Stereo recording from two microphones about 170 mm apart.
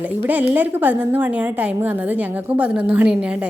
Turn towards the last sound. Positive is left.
turn(degrees=-5)  # may be behind; listen again after turning